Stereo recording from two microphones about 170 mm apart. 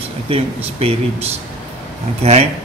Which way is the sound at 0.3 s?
35° right (ahead or behind).